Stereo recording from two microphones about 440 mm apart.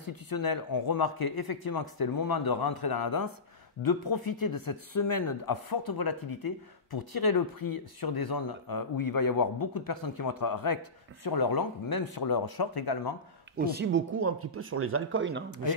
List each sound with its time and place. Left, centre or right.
0.0 s speech: left
13.6 s speech: right